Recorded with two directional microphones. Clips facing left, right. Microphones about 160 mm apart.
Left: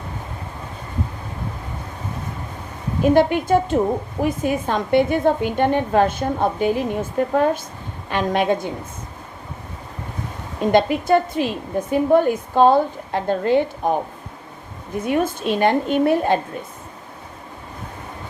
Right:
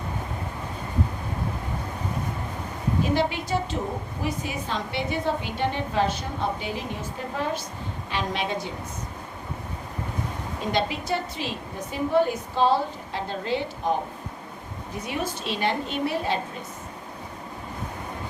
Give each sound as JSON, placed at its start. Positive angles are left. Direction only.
{"t": 3.0, "sound": "a woman's voice", "side_deg": 50}
{"t": 10.7, "sound": "a woman's voice", "side_deg": 50}
{"t": 15.0, "sound": "a woman's voice", "side_deg": 50}